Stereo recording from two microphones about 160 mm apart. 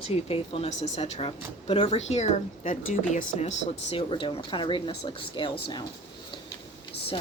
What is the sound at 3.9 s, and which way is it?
A woman's voice, 35° left (ahead or behind).